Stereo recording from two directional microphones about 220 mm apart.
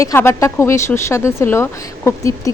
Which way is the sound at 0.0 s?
10° left (ahead or behind).